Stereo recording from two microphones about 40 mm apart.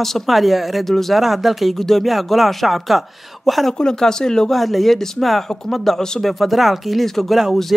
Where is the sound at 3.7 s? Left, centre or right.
Centre.